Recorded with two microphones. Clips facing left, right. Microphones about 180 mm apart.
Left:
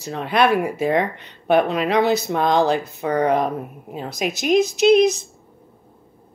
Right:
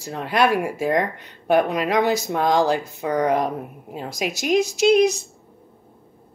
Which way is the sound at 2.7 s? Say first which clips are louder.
Left 1 dB; 65° left (ahead or behind).